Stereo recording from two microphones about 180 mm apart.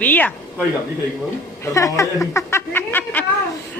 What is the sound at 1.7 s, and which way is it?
Speech, 15° left (ahead or behind).